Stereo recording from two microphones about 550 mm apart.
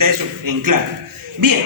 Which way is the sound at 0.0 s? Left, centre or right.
Right.